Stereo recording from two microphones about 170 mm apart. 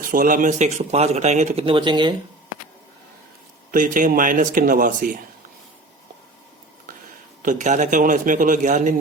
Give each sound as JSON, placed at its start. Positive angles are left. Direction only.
{"t": 0.0, "sound": "speech", "side_deg": -55}
{"t": 3.7, "sound": "speech", "side_deg": -50}
{"t": 7.4, "sound": "speech", "side_deg": -45}